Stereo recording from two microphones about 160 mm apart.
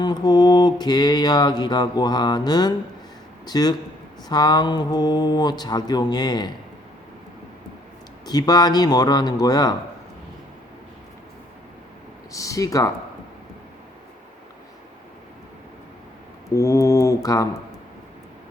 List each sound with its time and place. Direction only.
0.0 s mantra: 25° left (ahead or behind)
8.3 s mantra: 25° left (ahead or behind)
12.3 s mantra: 20° left (ahead or behind)
16.6 s mantra: 20° left (ahead or behind)